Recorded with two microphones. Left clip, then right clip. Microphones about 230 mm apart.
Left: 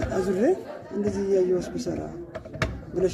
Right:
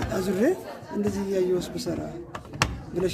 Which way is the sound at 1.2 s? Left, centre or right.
Right.